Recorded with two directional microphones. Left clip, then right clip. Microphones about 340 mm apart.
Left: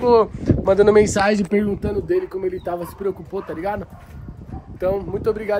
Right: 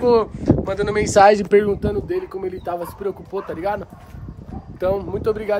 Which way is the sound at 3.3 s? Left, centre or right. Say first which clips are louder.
Right 1 dB; centre.